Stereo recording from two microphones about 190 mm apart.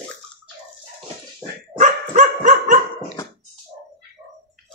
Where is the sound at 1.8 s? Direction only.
40° right (ahead or behind).